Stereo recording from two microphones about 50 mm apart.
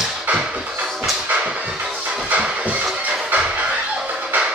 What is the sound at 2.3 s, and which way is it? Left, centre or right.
Music, right.